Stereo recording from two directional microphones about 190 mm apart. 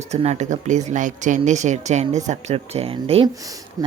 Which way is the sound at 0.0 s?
35° right (ahead or behind).